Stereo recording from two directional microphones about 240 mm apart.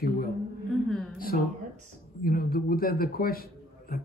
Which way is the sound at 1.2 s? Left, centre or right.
Left.